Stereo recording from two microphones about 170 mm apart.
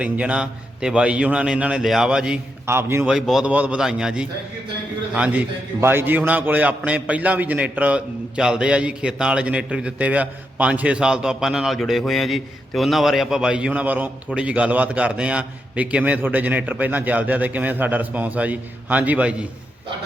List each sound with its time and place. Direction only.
0.0 s a man's voice: 5° right (ahead or behind)
3.1 s a man's voice: centre (ahead or behind)